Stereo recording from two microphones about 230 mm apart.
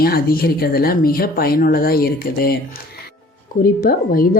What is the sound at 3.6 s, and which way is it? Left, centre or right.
Speech, left.